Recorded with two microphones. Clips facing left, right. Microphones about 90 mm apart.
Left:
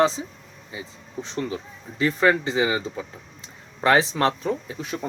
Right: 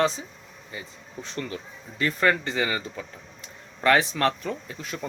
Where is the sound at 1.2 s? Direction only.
25° left (ahead or behind).